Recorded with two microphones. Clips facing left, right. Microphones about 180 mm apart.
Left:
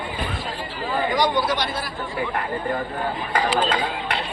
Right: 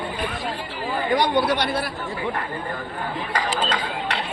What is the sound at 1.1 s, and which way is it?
Speech, 60° right (ahead or behind).